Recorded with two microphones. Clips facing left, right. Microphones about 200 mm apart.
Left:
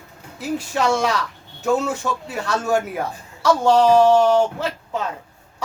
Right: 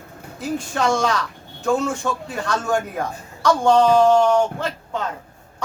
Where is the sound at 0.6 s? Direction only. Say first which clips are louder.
Left 1 dB; 5° left (ahead or behind).